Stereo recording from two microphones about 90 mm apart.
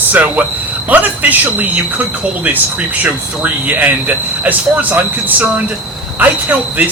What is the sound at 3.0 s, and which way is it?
Speech, 20° right (ahead or behind).